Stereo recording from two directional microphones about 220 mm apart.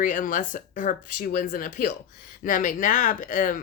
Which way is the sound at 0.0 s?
35° left (ahead or behind).